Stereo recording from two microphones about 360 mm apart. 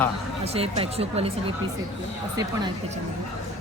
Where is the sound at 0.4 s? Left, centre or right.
Centre.